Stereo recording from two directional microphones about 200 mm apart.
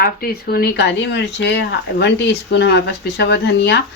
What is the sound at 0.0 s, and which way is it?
Speech, 50° left (ahead or behind).